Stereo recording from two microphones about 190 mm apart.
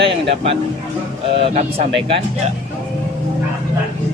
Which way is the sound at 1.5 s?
35° right (ahead or behind).